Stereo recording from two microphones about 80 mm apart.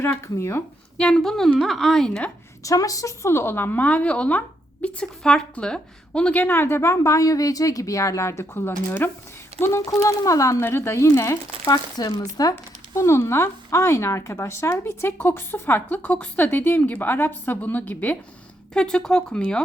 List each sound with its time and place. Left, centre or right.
0.0 s speech: left
0.9 s a woman's voice: centre
2.6 s speech: left
11.7 s speech: left
18.7 s speech: centre